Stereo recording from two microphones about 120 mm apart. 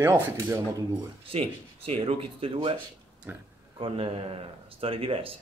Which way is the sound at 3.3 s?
15° right (ahead or behind).